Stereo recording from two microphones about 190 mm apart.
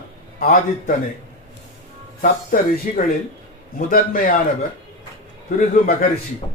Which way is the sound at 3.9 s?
50° left (ahead or behind).